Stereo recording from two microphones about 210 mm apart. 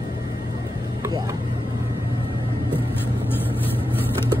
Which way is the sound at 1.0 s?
15° right (ahead or behind).